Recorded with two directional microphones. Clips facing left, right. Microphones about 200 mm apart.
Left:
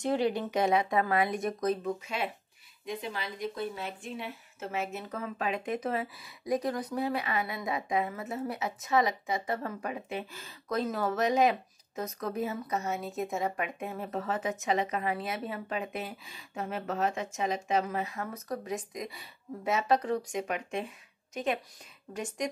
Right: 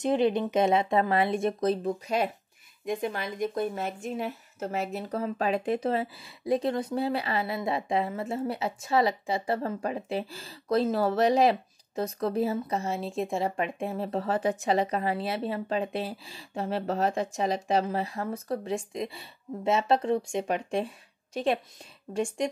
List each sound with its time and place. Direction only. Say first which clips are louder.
0.0 s speech: right 4 dB; 20° right (ahead or behind); by 2.3 s 40° right (ahead or behind)
2.8 s a woman's voice: right 6 dB; 50° right (ahead or behind); by 22.5 s 30° right (ahead or behind)